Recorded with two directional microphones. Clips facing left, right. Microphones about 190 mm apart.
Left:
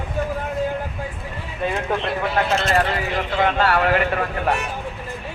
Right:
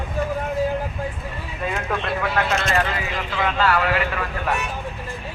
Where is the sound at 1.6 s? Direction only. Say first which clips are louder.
Left 3 dB; 25° left (ahead or behind); by 4.2 s 45° left (ahead or behind).